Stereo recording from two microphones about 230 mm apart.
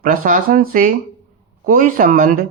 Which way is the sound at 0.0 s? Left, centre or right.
Right.